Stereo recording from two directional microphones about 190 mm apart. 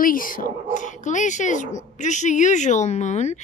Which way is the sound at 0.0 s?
45° left (ahead or behind).